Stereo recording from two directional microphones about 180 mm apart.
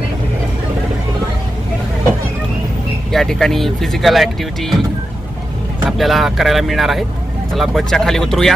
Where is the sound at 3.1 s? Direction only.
Centre (ahead or behind).